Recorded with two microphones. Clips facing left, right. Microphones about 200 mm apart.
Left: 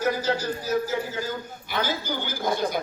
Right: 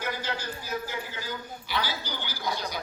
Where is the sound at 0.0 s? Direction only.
40° left (ahead or behind).